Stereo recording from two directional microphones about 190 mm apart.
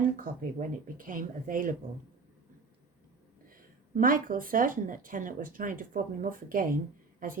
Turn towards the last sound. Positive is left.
turn(degrees=-45)  # may be behind; listen again after turning